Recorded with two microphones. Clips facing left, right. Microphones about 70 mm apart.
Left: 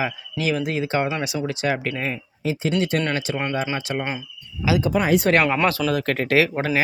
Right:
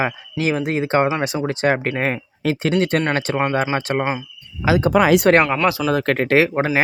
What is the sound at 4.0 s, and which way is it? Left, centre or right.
Speech, right.